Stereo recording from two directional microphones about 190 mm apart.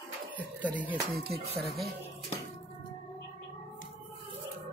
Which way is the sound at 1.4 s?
35° right (ahead or behind).